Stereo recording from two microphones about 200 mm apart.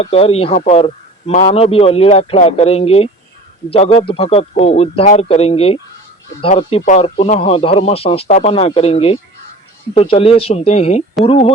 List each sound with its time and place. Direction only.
0.0 s a man's voice: 30° left (ahead or behind)